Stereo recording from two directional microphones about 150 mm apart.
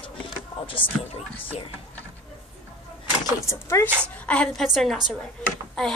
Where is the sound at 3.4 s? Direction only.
20° left (ahead or behind).